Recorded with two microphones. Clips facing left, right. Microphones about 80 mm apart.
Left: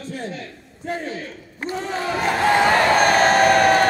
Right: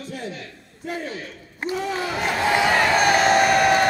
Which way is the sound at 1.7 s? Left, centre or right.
Left.